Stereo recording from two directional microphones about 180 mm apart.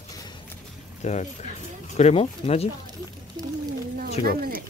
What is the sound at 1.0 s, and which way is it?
Speech, 40° left (ahead or behind).